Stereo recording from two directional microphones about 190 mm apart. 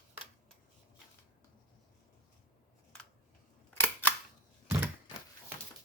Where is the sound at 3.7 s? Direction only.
10° left (ahead or behind).